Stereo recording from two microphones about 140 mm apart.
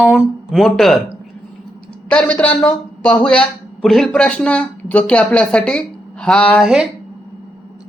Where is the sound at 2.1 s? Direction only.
10° left (ahead or behind).